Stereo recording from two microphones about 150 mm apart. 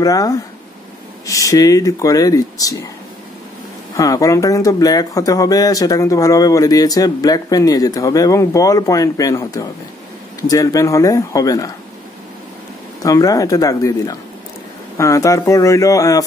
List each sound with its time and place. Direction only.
0.0 s speech: 25° left (ahead or behind)
3.9 s speech: 25° left (ahead or behind)
13.0 s speech: 25° left (ahead or behind)